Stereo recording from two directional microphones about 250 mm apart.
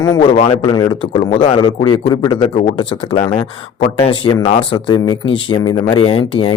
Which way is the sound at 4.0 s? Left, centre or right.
Centre.